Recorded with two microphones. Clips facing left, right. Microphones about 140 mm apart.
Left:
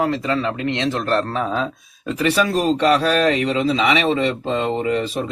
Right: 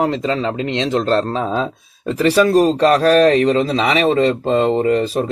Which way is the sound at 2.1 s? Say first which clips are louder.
Right 6 dB; 35° right (ahead or behind).